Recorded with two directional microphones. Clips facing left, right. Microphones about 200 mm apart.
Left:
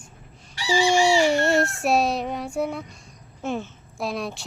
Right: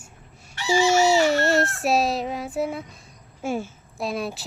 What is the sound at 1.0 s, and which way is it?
A woman's voice, 5° right (ahead or behind).